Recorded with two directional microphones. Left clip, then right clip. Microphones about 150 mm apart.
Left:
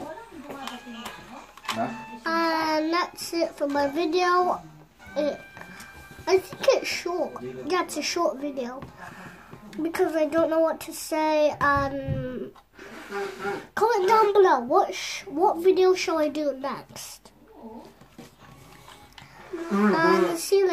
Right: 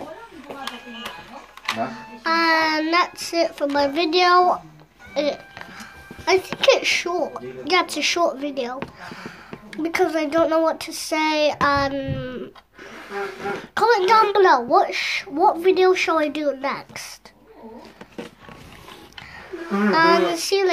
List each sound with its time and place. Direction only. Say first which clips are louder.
2.0 s a child's voice: right 5 dB; 5° right (ahead or behind)
9.0 s a sound: right 6 dB; 15° right (ahead or behind)
9.8 s speech: right 3 dB; 15° right (ahead or behind)
13.7 s speech: right 5 dB; 5° right (ahead or behind)
19.9 s speech: right 6 dB; 5° right (ahead or behind)